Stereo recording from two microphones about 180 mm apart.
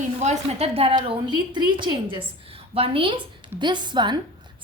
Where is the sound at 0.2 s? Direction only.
35° right (ahead or behind).